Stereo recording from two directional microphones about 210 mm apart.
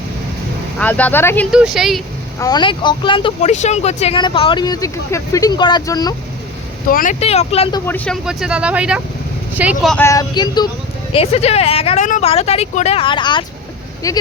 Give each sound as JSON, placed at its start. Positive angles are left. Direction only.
{"t": 0.8, "sound": "speech", "side_deg": 5}
{"t": 1.5, "sound": "speech", "side_deg": -5}
{"t": 2.4, "sound": "speech", "side_deg": 20}
{"t": 6.9, "sound": "speech", "side_deg": 40}
{"t": 7.9, "sound": "speech", "side_deg": 5}
{"t": 10.0, "sound": "speech", "side_deg": 15}